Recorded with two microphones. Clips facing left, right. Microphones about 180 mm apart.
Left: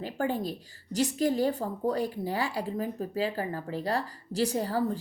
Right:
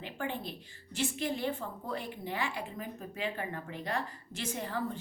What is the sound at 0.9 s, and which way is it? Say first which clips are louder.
A woman's voice: left 8 dB; 40° left (ahead or behind).